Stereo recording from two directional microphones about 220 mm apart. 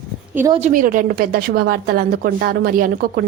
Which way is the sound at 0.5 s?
35° right (ahead or behind).